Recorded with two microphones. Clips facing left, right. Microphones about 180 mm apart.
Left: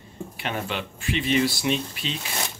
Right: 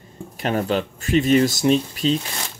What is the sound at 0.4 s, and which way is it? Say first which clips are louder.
Speech: right 9 dB; 40° right (ahead or behind).